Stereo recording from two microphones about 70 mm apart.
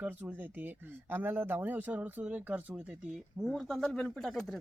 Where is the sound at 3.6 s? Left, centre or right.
Centre.